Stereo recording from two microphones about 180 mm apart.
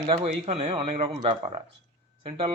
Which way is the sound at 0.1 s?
35° right (ahead or behind).